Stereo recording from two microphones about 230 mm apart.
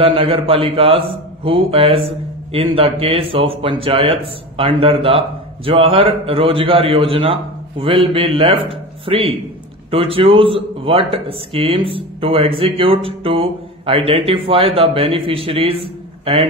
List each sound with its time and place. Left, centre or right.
0.0 s speech: right